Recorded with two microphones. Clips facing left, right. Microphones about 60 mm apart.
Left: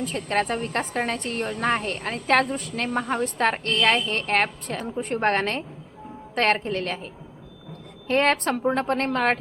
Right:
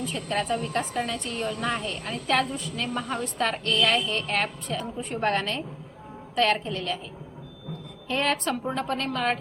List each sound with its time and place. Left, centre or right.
0.0 s a woman's voice: left
8.0 s a woman's voice: left